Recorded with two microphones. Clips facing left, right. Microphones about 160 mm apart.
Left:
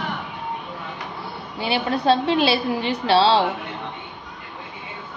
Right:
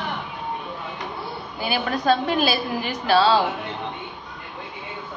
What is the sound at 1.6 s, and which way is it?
A woman's voice, 30° left (ahead or behind).